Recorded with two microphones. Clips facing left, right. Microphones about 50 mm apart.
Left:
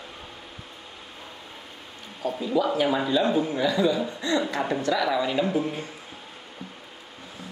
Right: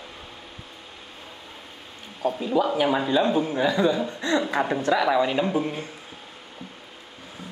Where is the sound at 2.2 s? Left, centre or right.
Right.